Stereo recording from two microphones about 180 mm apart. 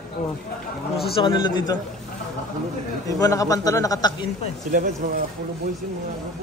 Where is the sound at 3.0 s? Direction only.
20° left (ahead or behind).